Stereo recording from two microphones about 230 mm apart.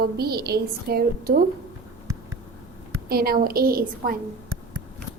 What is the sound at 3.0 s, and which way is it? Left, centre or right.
Speech, right.